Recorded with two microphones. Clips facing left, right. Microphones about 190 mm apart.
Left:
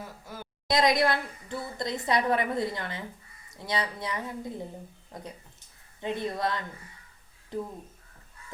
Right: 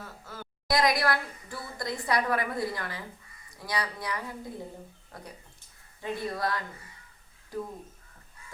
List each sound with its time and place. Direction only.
0.0 s a woman's voice: 15° left (ahead or behind)